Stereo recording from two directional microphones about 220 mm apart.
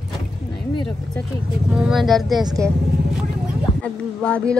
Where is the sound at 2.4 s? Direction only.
15° right (ahead or behind).